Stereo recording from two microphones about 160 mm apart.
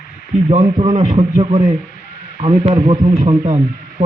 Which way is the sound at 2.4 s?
45° right (ahead or behind).